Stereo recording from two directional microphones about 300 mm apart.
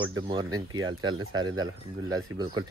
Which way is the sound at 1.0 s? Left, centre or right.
Right.